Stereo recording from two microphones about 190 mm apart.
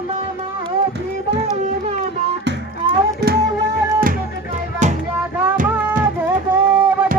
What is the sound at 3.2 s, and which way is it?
Music, 55° right (ahead or behind).